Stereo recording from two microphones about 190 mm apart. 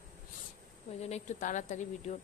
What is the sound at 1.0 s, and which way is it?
Speech, 40° left (ahead or behind).